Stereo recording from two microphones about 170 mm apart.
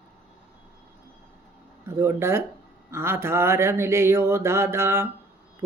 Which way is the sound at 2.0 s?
15° right (ahead or behind).